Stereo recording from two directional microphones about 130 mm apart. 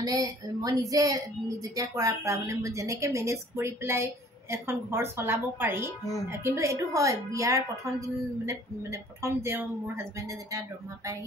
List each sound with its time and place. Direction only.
0.0 s speech: 30° right (ahead or behind)